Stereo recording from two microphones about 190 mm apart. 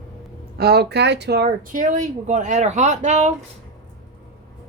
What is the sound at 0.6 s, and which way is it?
Speech, 60° right (ahead or behind).